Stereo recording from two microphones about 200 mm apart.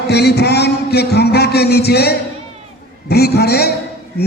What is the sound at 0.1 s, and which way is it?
A man's voice, 55° left (ahead or behind).